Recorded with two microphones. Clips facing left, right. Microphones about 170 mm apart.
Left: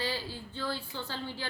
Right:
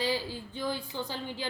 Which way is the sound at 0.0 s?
15° right (ahead or behind).